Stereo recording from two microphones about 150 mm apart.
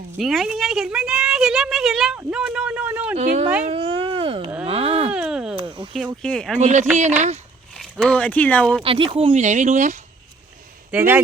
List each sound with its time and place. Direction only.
0.2 s a woman's voice: centre (ahead or behind)
3.2 s speech: 50° right (ahead or behind)
3.6 s a sound: 40° right (ahead or behind)
5.1 s a sound: 5° right (ahead or behind)
5.5 s a sound: 35° right (ahead or behind)
6.2 s a woman's voice: 5° left (ahead or behind)
6.6 s speech: 55° right (ahead or behind)
7.7 s speech: centre (ahead or behind)
8.8 s speech: 35° right (ahead or behind)
9.3 s speech: 50° right (ahead or behind)
10.9 s a man's voice: 10° right (ahead or behind)